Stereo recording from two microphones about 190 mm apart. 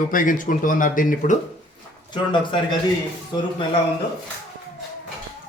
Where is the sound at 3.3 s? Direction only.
20° left (ahead or behind).